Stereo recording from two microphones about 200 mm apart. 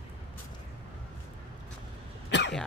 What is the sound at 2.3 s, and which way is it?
Cough, 60° left (ahead or behind).